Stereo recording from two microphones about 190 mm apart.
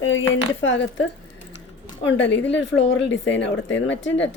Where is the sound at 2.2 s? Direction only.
70° left (ahead or behind).